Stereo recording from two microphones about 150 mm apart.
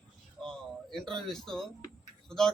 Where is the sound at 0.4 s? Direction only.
5° left (ahead or behind).